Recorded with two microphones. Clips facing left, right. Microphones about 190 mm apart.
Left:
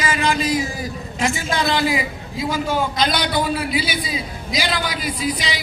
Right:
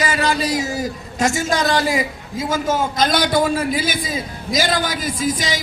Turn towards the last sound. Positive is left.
turn(degrees=-45)  # may be behind; listen again after turning